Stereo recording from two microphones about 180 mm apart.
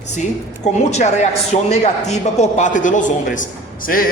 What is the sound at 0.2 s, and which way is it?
A man's voice, 40° left (ahead or behind).